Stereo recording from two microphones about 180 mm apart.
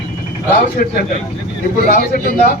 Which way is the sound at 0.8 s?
50° left (ahead or behind).